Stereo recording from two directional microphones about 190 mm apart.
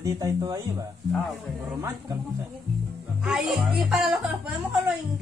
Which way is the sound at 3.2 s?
Centre (ahead or behind).